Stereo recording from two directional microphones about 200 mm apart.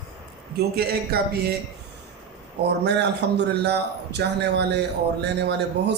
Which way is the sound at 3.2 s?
55° right (ahead or behind).